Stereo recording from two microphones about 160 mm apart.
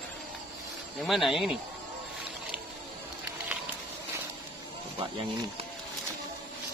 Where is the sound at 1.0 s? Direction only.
Centre (ahead or behind).